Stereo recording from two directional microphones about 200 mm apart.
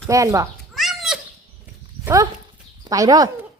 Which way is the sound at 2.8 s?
20° right (ahead or behind).